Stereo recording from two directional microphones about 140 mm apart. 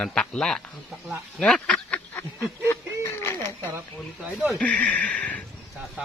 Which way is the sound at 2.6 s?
20° left (ahead or behind).